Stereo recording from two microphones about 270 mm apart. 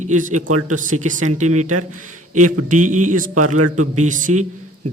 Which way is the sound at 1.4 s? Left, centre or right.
Right.